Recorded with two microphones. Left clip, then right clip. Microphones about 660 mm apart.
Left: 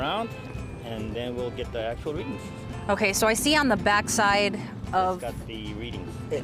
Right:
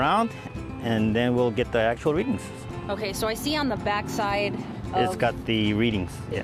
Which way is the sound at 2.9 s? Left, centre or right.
Left.